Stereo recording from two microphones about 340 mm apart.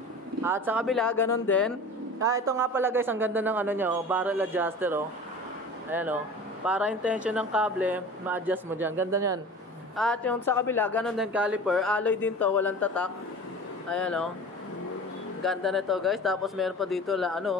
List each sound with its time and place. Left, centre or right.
0.4 s speech: centre
2.1 s speech: centre
9.9 s speech: centre
15.4 s speech: centre